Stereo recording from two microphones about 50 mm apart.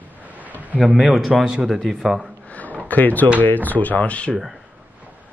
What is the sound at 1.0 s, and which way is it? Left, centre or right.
Speech, centre.